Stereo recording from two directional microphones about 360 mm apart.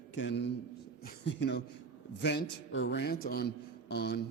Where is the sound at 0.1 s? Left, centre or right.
Left.